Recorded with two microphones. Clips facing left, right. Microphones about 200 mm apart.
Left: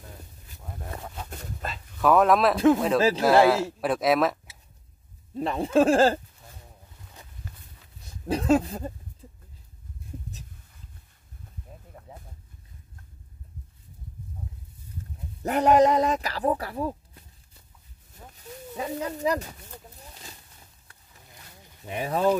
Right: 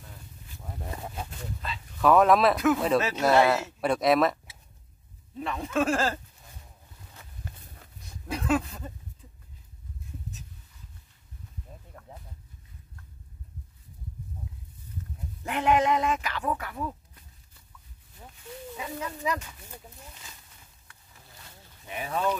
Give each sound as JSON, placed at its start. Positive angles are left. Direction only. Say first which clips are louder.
{"t": 1.3, "sound": "speech", "louder": "left 1 dB", "side_deg": 45}
{"t": 2.0, "sound": "speech", "louder": "even", "side_deg": 0}
{"t": 2.5, "sound": "speech", "louder": "left 5 dB", "side_deg": 30}
{"t": 3.2, "sound": "speech", "louder": "left 2 dB", "side_deg": 0}
{"t": 5.3, "sound": "speech", "louder": "left 7 dB", "side_deg": 35}
{"t": 8.3, "sound": "speech", "louder": "left 5 dB", "side_deg": 30}
{"t": 12.1, "sound": "a sound", "louder": "left 1 dB", "side_deg": 5}
{"t": 15.4, "sound": "speech", "louder": "left 5 dB", "side_deg": 40}
{"t": 18.3, "sound": "a sound", "louder": "left 1 dB", "side_deg": 35}
{"t": 21.8, "sound": "speech", "louder": "left 5 dB", "side_deg": 30}